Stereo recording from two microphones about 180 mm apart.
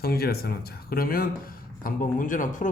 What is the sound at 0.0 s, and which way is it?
Speech, 60° left (ahead or behind).